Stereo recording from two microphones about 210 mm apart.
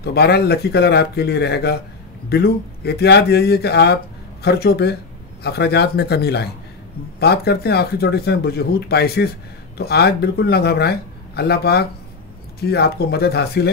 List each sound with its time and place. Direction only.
0.0 s speech: 50° left (ahead or behind)